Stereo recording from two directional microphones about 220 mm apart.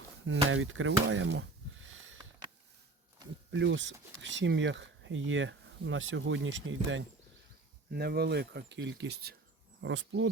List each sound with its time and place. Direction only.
0.3 s speech: 60° right (ahead or behind)
3.5 s speech: 55° right (ahead or behind)
7.9 s speech: 45° right (ahead or behind)